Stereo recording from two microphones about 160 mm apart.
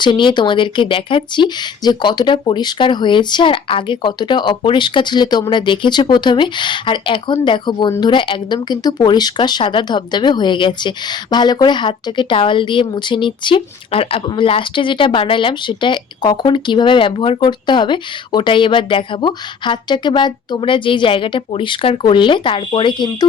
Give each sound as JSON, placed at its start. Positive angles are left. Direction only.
{"t": 0.0, "sound": "speech", "side_deg": 30}